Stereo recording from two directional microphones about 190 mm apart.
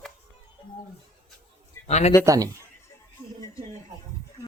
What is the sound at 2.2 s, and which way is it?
Speech, 15° right (ahead or behind).